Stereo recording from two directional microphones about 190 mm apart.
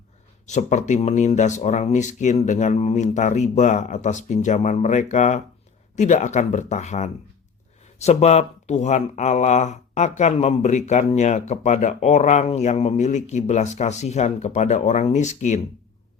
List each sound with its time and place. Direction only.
0.4 s speech: 40° left (ahead or behind)